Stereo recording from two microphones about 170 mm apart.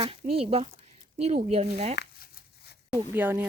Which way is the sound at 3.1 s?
10° right (ahead or behind).